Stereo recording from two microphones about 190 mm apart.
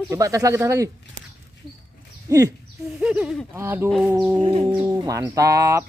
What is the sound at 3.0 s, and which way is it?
Speech, 5° right (ahead or behind).